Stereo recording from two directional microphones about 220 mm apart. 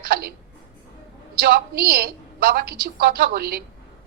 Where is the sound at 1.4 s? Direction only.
45° right (ahead or behind).